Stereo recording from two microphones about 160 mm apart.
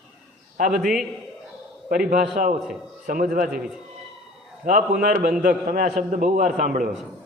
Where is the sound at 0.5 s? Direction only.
55° right (ahead or behind).